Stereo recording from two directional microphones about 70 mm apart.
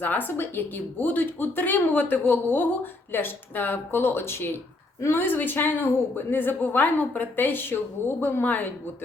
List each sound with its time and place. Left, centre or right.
0.0 s a woman's voice: left